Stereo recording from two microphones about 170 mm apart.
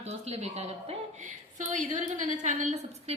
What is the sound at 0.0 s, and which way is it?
A woman's voice, 40° right (ahead or behind).